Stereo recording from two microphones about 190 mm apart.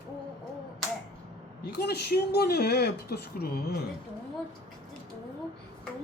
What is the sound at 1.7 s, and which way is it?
Speech, 60° left (ahead or behind).